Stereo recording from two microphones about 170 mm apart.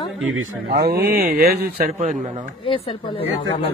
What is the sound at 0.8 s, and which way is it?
Speech, 65° right (ahead or behind).